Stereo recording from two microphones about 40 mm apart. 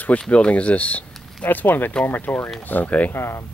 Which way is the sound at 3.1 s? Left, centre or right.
Left.